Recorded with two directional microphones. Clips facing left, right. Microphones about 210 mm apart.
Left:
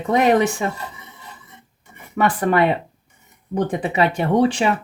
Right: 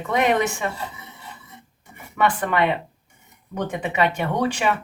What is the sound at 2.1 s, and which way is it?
Speech, 40° left (ahead or behind).